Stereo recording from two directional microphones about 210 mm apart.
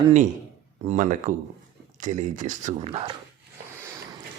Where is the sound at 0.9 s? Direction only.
35° right (ahead or behind).